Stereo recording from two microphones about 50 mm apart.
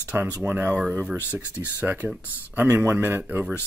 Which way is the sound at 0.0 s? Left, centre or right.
Right.